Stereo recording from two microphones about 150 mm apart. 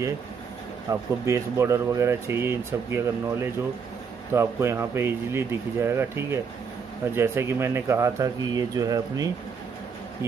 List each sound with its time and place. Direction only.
0.8 s speech: 20° right (ahead or behind)